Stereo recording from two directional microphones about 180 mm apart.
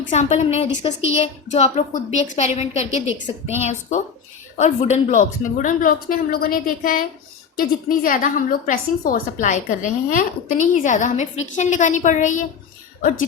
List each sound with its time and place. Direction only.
0.1 s a woman's voice: 40° left (ahead or behind)